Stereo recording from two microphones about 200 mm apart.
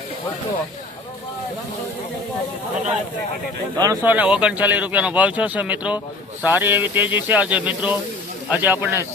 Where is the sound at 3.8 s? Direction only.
10° right (ahead or behind).